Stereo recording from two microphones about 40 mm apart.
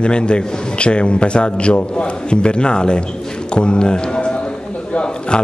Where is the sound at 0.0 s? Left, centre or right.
Left.